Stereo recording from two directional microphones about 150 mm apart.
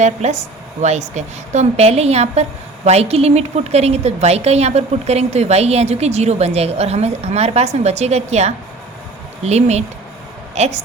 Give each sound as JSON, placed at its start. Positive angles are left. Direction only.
{"t": 0.0, "sound": "a woman's voice", "side_deg": -50}